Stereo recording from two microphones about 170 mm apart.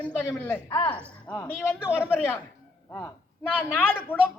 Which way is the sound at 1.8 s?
5° right (ahead or behind).